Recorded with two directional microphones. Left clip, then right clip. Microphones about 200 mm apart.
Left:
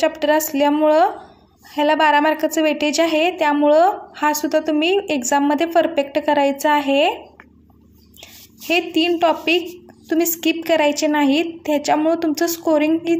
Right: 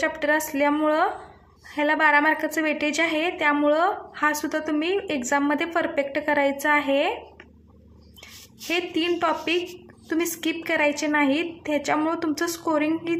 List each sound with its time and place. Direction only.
0.0 s a woman's voice: 25° left (ahead or behind)
8.6 s a woman's voice: 25° left (ahead or behind)